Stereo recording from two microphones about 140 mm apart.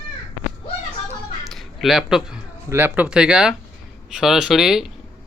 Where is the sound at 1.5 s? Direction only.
Centre (ahead or behind).